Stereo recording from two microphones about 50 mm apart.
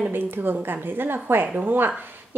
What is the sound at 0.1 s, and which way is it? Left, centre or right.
A woman's voice, right.